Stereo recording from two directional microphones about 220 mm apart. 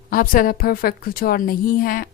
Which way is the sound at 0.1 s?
40° left (ahead or behind).